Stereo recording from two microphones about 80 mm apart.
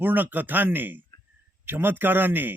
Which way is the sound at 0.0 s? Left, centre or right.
Right.